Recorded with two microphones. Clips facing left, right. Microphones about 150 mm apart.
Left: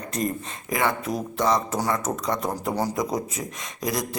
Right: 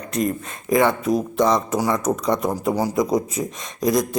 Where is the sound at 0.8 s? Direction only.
20° right (ahead or behind).